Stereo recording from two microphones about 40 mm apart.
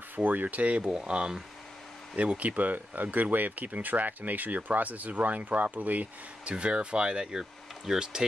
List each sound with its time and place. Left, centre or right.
0.1 s speech: right
6.4 s speech: right